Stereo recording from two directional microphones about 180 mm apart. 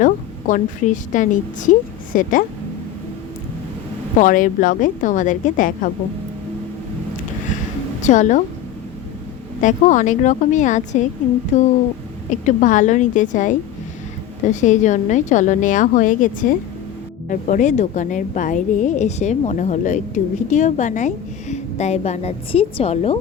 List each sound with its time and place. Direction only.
0.0 s a sound: 45° left (ahead or behind)
1.1 s a woman's voice: 45° left (ahead or behind)
4.2 s a woman's voice: 45° left (ahead or behind)
8.0 s a woman's voice: 45° left (ahead or behind)
9.6 s a woman's voice: 45° left (ahead or behind)
14.5 s a woman's voice: 40° left (ahead or behind)